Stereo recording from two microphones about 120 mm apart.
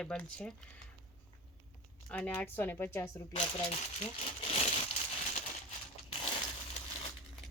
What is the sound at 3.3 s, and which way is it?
Speech, 50° left (ahead or behind).